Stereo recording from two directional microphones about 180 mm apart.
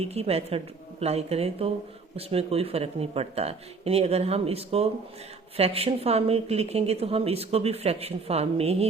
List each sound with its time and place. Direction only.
0.0 s a woman's voice: 35° right (ahead or behind)